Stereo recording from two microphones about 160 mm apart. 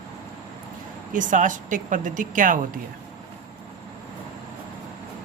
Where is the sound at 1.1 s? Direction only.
55° right (ahead or behind).